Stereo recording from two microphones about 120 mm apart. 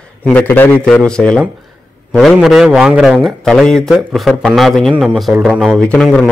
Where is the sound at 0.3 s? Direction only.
15° left (ahead or behind).